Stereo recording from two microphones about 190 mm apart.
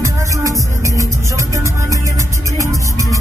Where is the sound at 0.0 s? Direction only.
15° right (ahead or behind).